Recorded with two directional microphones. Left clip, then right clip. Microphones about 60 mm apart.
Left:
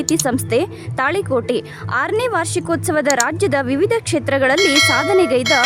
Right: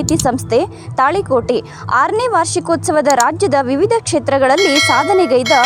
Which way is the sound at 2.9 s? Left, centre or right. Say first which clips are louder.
Right 5 dB; centre.